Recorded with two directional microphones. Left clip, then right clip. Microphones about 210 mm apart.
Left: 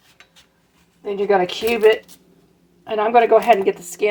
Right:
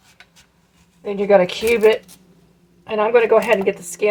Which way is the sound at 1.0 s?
15° left (ahead or behind).